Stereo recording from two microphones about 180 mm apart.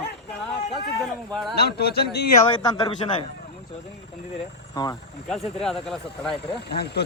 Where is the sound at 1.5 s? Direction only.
60° left (ahead or behind).